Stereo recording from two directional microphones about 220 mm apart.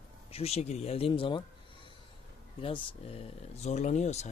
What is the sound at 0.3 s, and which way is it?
Speech, 25° left (ahead or behind).